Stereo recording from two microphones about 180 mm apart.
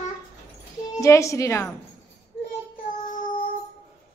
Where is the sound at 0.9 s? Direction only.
15° left (ahead or behind).